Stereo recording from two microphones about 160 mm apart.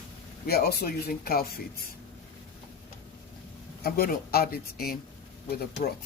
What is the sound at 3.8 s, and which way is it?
Speech, 70° left (ahead or behind).